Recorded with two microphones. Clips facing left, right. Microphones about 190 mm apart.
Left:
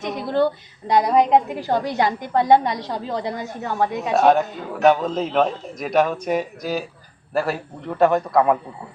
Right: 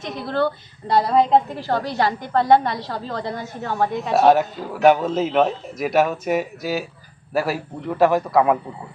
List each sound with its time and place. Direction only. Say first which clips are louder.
0.0 s a woman's voice: left 2 dB; 20° left (ahead or behind)
4.1 s a man's voice: right 1 dB; 5° right (ahead or behind)